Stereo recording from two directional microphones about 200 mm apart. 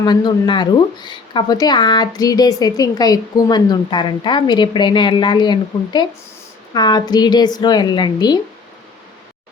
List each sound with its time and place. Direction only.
0.0 s speech: 20° left (ahead or behind)